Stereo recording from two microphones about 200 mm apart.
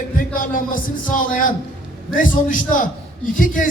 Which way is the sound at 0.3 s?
45° left (ahead or behind).